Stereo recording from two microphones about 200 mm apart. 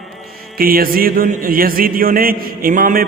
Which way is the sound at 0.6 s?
45° right (ahead or behind).